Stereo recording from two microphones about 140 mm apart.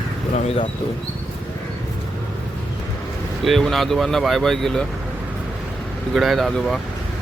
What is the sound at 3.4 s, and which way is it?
Speech, centre (ahead or behind).